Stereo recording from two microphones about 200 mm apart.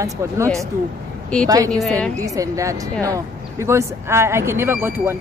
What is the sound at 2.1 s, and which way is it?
A woman's voice, 15° right (ahead or behind).